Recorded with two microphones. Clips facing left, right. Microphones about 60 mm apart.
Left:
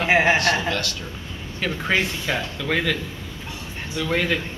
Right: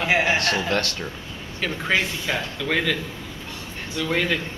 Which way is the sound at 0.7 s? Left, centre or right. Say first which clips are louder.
Right 2 dB; right.